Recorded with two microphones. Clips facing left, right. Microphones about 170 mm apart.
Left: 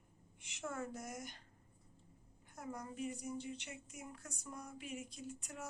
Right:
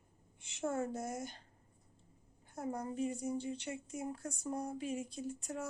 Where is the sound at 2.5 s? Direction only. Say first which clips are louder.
Right 7 dB; 30° right (ahead or behind).